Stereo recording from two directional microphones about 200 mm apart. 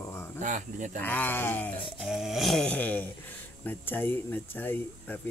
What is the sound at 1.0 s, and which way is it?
Speech, 10° left (ahead or behind).